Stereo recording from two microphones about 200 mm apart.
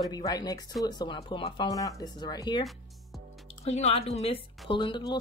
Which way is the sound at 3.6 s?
35° left (ahead or behind).